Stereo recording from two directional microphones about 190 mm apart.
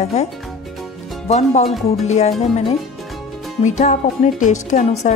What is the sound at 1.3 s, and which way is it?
Speech, 35° left (ahead or behind).